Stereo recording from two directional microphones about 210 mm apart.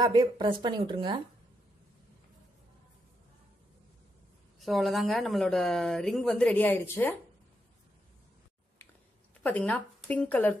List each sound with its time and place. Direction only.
0.0 s speech: 20° right (ahead or behind)
4.6 s speech: centre (ahead or behind)
9.4 s speech: 5° left (ahead or behind)